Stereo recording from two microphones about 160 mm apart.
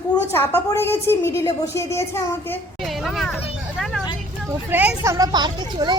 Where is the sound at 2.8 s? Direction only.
Centre (ahead or behind).